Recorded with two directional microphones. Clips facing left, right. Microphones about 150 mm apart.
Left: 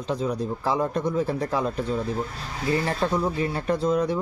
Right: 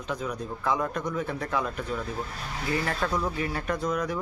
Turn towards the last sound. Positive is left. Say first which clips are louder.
# left 6 dB
turn(degrees=30)  # may be behind; listen again after turning